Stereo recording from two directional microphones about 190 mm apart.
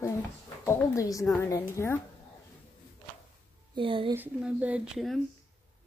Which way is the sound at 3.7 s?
25° right (ahead or behind).